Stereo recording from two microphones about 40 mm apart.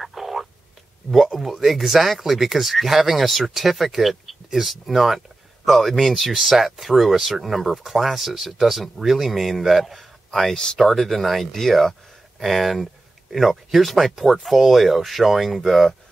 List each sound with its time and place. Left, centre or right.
0.0 s a sound: centre
1.1 s speech: centre
10.5 s speech: centre
10.8 s speech: centre